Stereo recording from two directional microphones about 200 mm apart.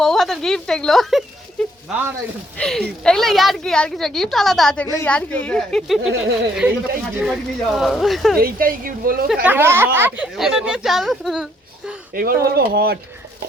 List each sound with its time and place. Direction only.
0.0 s a woman's voice: centre (ahead or behind)
2.6 s a woman's voice: 5° left (ahead or behind)
6.0 s speech: 65° right (ahead or behind)
7.2 s a woman's voice: centre (ahead or behind)
8.4 s speech: 45° right (ahead or behind)
9.2 s a woman's voice: 5° right (ahead or behind)
12.1 s speech: 45° right (ahead or behind)